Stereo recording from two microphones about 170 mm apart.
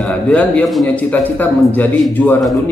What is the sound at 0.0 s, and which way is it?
A man's voice, 10° left (ahead or behind).